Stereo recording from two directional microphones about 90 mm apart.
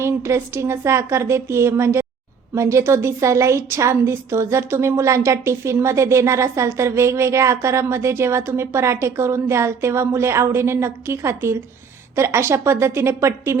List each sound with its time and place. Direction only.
0.0 s a woman's voice: 30° right (ahead or behind)